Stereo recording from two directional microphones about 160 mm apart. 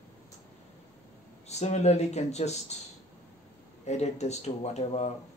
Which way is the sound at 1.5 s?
45° left (ahead or behind).